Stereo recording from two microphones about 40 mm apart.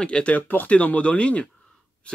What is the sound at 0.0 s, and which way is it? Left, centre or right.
Speech, left.